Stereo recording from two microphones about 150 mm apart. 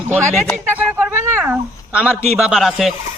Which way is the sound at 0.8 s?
10° right (ahead or behind).